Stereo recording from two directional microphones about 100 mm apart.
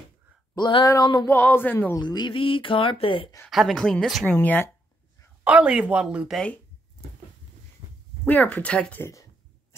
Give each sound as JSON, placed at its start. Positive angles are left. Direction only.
{"t": 0.6, "sound": "speech", "side_deg": 50}
{"t": 0.8, "sound": "a sound", "side_deg": 40}
{"t": 1.2, "sound": "speech", "side_deg": 25}
{"t": 2.0, "sound": "speech", "side_deg": 45}
{"t": 3.4, "sound": "speech", "side_deg": 0}
{"t": 4.3, "sound": "speech", "side_deg": 15}
{"t": 5.4, "sound": "speech", "side_deg": -10}
{"t": 7.8, "sound": "a sound", "side_deg": -55}
{"t": 8.3, "sound": "speech", "side_deg": 15}